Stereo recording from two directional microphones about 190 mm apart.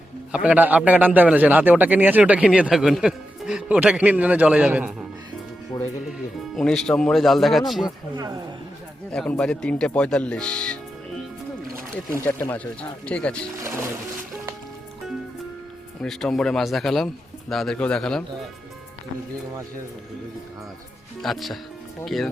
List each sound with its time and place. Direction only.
0.3 s a man's voice: 5° right (ahead or behind)
5.7 s music: 25° left (ahead or behind)
6.6 s speech: centre (ahead or behind)
8.1 s speech: 20° right (ahead or behind)
9.1 s speech: 5° left (ahead or behind)
12.2 s speech: 10° left (ahead or behind)
16.0 s speech: centre (ahead or behind)
21.2 s speech: centre (ahead or behind)